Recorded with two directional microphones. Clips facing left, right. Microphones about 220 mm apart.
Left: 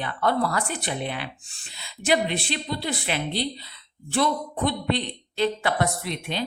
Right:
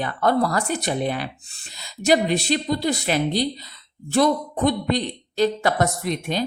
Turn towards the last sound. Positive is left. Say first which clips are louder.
# right 5 dB
turn(degrees=-45)  # may be behind; listen again after turning